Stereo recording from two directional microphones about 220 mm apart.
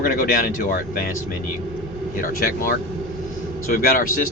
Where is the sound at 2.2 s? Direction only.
40° left (ahead or behind).